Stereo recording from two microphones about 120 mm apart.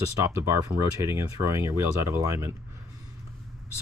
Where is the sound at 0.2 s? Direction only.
25° right (ahead or behind).